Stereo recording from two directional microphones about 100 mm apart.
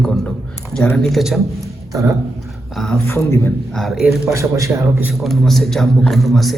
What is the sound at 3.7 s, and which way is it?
Speech, centre (ahead or behind).